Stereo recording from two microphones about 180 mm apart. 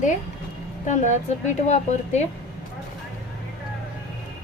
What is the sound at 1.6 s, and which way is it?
Speech, 40° left (ahead or behind).